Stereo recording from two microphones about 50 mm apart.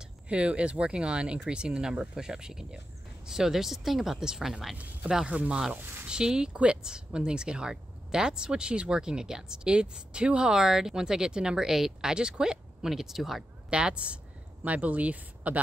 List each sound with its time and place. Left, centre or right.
0.0 s speech: right
5.3 s speech: right
5.8 s speech: right
6.0 s speech: centre
13.7 s speech: right